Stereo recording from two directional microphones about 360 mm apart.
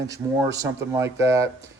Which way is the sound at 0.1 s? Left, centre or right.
Centre.